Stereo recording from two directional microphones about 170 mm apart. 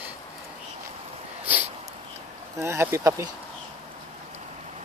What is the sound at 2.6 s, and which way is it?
Speech, 15° right (ahead or behind).